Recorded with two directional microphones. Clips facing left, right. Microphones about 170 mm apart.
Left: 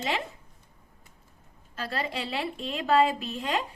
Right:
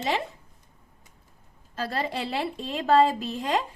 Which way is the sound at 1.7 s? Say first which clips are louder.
Right 3 dB; 40° right (ahead or behind).